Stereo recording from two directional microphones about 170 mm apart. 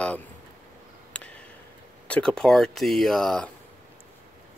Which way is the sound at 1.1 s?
5° left (ahead or behind).